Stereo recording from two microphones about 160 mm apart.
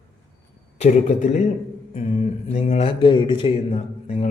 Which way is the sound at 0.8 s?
45° left (ahead or behind).